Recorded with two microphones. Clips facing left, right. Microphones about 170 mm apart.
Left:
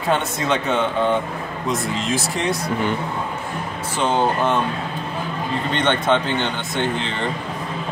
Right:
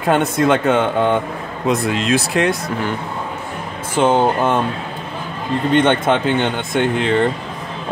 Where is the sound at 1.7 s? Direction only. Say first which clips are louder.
Right 6 dB; 65° right (ahead or behind).